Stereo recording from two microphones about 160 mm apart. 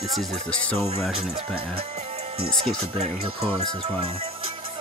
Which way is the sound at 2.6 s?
40° right (ahead or behind).